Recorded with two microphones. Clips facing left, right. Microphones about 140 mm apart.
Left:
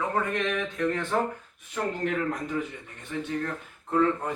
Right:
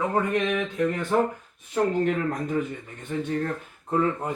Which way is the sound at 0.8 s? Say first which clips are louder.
Right 2 dB; 15° right (ahead or behind).